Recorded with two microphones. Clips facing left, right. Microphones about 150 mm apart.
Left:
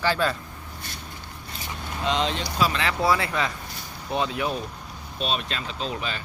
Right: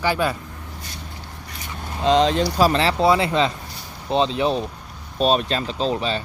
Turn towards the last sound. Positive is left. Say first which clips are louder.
# right 8 dB
turn(degrees=-30)  # may be behind; listen again after turning